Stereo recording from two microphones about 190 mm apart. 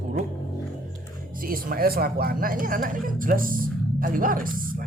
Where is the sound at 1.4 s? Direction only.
50° right (ahead or behind).